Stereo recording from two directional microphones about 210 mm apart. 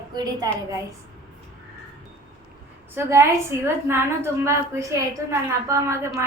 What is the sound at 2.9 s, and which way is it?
A woman's voice, 10° right (ahead or behind).